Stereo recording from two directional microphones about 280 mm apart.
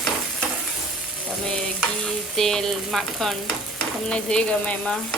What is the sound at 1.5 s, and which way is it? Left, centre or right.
Stir, centre.